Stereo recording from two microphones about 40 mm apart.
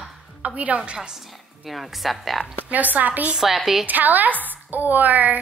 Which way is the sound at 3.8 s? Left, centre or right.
Right.